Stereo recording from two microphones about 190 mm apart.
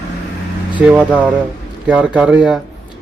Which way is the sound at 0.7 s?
5° right (ahead or behind).